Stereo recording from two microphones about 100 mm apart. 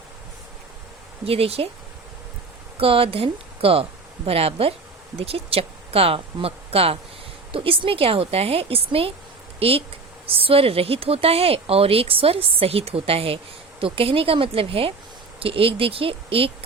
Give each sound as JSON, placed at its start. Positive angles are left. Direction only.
{"t": 1.2, "sound": "speech", "side_deg": -80}
{"t": 2.7, "sound": "speech", "side_deg": -65}